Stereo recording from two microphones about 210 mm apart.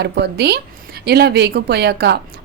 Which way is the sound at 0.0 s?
50° right (ahead or behind).